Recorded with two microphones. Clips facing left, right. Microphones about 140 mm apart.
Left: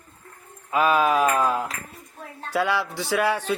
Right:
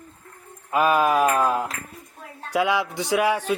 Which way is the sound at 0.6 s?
5° right (ahead or behind).